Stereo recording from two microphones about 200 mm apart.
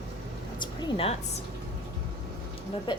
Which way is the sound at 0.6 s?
25° left (ahead or behind).